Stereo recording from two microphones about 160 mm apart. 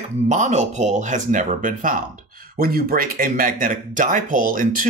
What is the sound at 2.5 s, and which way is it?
Speech, 70° right (ahead or behind).